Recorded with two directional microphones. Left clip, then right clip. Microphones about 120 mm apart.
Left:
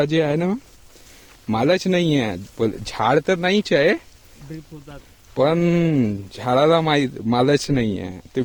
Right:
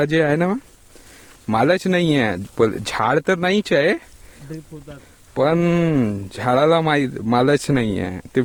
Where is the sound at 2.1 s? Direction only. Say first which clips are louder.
Right 3 dB; 90° right.